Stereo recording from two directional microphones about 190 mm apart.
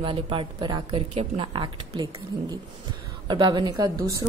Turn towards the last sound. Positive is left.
turn(degrees=-20)  # may be behind; listen again after turning